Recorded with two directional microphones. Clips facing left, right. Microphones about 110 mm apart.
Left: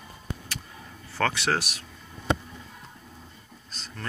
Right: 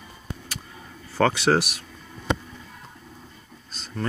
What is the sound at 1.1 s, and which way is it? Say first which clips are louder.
Speech: right 6 dB; 15° right (ahead or behind).